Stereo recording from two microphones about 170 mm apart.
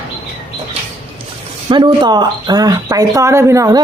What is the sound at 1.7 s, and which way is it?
Speech, 25° right (ahead or behind).